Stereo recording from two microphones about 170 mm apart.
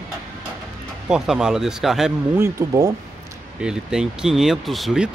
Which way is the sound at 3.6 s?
5° right (ahead or behind).